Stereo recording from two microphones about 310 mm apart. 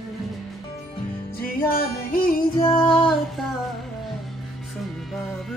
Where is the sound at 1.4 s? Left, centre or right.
Left.